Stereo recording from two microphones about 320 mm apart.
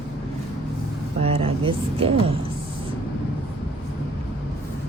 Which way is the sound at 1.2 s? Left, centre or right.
Centre.